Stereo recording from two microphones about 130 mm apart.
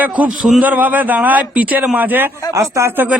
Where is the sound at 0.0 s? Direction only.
10° right (ahead or behind).